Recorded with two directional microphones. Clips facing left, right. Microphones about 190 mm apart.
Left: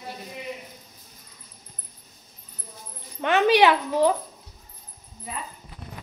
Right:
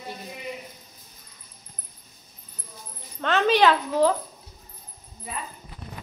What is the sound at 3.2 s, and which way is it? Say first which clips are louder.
Speech: left 2 dB; 15° left (ahead or behind).